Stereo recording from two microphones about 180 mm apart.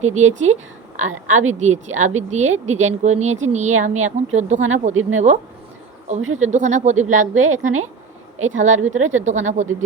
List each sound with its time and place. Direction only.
0.0 s speech: 40° right (ahead or behind)